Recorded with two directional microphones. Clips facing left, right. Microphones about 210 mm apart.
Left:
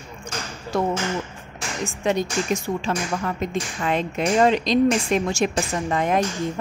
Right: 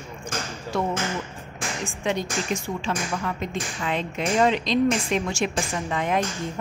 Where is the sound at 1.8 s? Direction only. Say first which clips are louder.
Left 5 dB; 45° left (ahead or behind).